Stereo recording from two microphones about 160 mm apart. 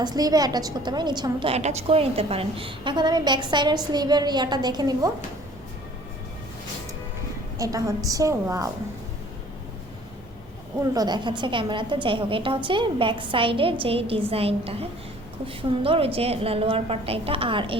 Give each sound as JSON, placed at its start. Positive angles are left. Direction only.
{"t": 0.0, "sound": "a woman's voice", "side_deg": -25}
{"t": 7.6, "sound": "a woman's voice", "side_deg": -20}
{"t": 10.9, "sound": "a woman's voice", "side_deg": -25}